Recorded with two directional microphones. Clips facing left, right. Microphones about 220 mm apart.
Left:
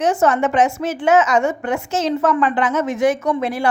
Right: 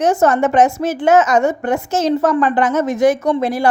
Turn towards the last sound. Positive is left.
turn(degrees=-40)  # may be behind; listen again after turning